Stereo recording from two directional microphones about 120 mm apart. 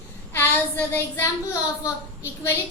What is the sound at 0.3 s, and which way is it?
Child singing, 20° left (ahead or behind).